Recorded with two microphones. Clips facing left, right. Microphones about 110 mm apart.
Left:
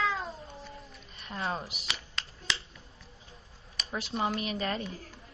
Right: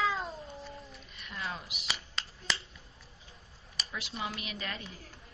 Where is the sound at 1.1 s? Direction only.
35° left (ahead or behind).